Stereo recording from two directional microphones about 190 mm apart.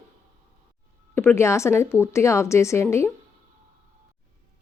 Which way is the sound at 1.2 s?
15° left (ahead or behind).